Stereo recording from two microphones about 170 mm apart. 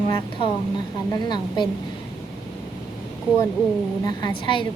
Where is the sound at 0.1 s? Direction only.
30° left (ahead or behind).